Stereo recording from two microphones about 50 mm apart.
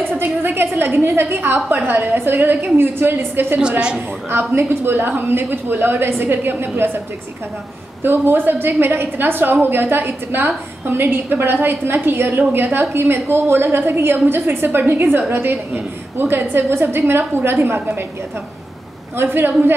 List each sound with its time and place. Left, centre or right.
0.1 s a woman's voice: right
8.0 s a woman's voice: right
19.1 s a woman's voice: right